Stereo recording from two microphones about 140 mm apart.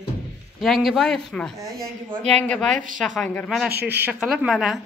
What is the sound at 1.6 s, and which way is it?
Speech, 25° right (ahead or behind).